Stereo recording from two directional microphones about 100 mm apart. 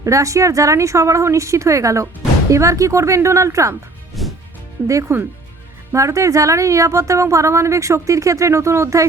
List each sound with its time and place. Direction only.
0.0 s a woman's voice: 30° right (ahead or behind)
4.2 s music: centre (ahead or behind)
4.9 s a woman's voice: 35° right (ahead or behind)